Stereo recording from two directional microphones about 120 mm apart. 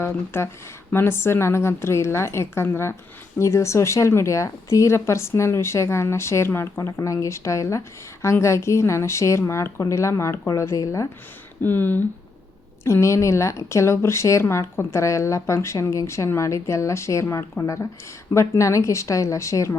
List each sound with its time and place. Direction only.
0.0 s a woman's voice: 20° left (ahead or behind)
11.6 s a woman's voice: 15° left (ahead or behind)